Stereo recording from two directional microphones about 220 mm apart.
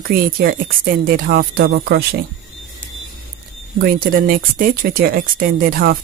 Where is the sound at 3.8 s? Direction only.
40° right (ahead or behind).